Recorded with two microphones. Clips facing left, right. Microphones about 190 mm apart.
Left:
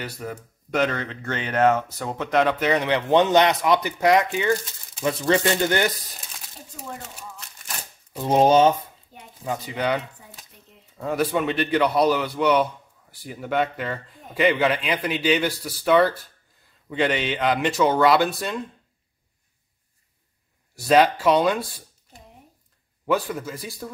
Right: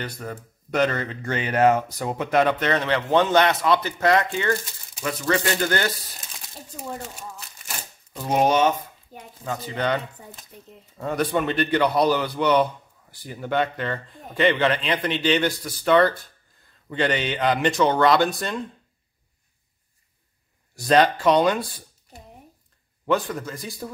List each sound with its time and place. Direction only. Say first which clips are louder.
0.0 s speech: even; 5° left (ahead or behind)
2.6 s a man's voice: left 1 dB; 15° left (ahead or behind)
8.2 s speech: left 3 dB; 30° left (ahead or behind)
9.4 s a man's voice: left 1 dB; 10° left (ahead or behind)
20.7 s speech: left 1 dB; 5° left (ahead or behind)
23.0 s speech: even; 5° left (ahead or behind)